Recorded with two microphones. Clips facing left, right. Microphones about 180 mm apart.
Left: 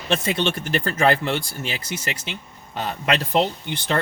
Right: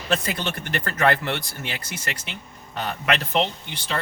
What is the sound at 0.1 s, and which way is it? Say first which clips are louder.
Speech: left 4 dB; 25° left (ahead or behind).